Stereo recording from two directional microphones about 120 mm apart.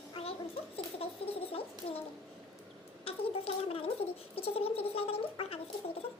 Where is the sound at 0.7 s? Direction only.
50° left (ahead or behind).